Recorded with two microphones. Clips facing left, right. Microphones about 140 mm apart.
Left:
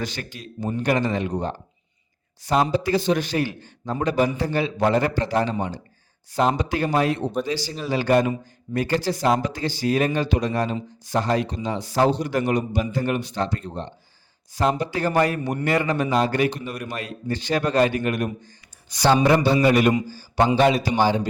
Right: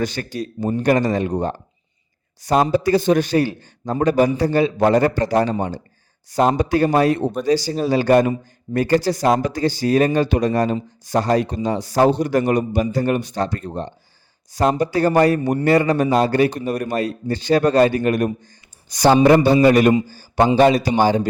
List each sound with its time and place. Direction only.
0.0 s a man's voice: 45° right (ahead or behind)